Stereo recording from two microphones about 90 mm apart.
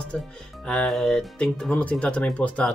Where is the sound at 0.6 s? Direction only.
5° left (ahead or behind).